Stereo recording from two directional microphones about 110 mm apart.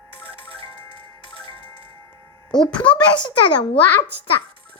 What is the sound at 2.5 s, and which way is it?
Speech, 45° left (ahead or behind).